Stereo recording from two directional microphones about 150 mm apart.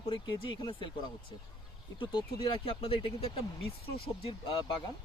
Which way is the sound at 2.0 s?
35° left (ahead or behind).